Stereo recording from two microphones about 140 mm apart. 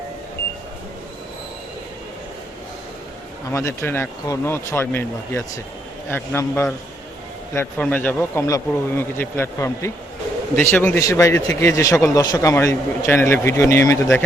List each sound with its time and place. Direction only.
3.5 s a man's voice: 20° left (ahead or behind)